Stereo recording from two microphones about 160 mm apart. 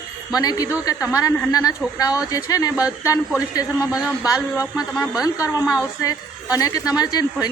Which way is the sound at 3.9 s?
5° right (ahead or behind).